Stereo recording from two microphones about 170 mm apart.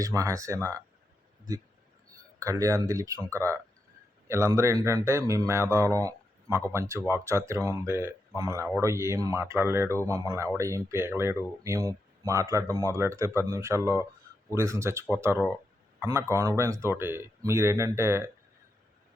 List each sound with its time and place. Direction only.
0.0 s speech: 20° right (ahead or behind)
2.1 s speech: 20° right (ahead or behind)